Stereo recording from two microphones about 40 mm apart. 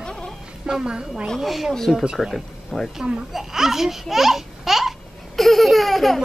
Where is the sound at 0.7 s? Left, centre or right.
Centre.